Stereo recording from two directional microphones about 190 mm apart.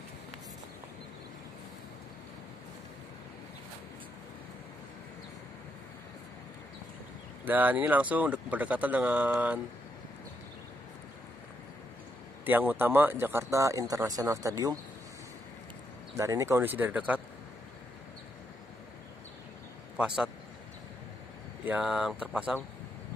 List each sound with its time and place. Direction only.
7.4 s speech: 10° right (ahead or behind)
12.4 s speech: 10° right (ahead or behind)
16.2 s speech: 15° right (ahead or behind)
21.6 s speech: 5° right (ahead or behind)